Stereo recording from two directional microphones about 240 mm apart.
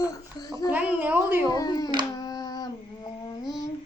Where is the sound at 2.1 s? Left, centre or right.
Centre.